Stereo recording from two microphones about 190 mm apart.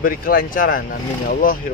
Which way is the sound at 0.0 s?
50° left (ahead or behind).